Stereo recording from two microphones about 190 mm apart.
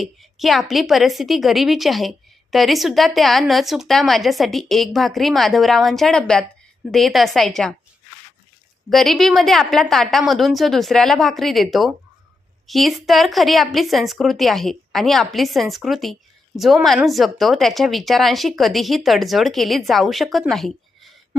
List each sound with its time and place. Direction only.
0.0 s a woman's voice: centre (ahead or behind)
8.9 s a woman's voice: centre (ahead or behind)